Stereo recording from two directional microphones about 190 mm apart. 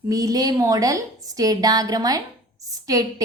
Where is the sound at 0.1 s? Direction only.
20° right (ahead or behind).